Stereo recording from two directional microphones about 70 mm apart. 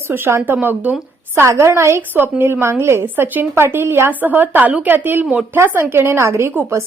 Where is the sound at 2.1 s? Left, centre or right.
Right.